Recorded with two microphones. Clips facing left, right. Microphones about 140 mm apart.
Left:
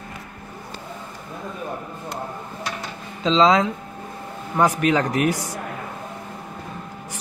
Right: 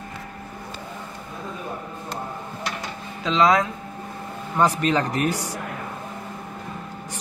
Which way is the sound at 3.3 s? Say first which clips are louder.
Left 2 dB; 20° left (ahead or behind).